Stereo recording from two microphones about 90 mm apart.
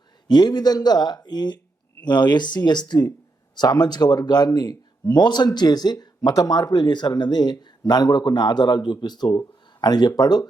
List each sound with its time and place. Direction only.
0.3 s speech: 50° left (ahead or behind)